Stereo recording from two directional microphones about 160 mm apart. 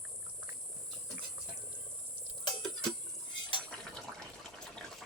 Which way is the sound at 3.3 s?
30° left (ahead or behind).